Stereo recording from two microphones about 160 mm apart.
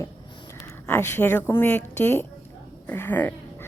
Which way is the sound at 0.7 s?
15° left (ahead or behind).